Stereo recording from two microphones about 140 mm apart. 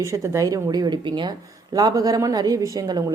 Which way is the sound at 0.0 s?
20° right (ahead or behind).